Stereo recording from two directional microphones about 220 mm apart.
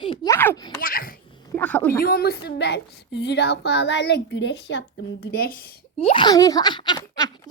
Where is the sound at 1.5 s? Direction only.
5° left (ahead or behind).